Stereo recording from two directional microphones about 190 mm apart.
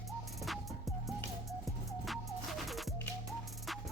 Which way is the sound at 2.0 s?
Centre (ahead or behind).